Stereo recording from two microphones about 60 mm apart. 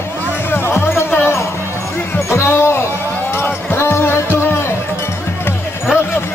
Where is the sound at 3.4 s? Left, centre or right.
Left.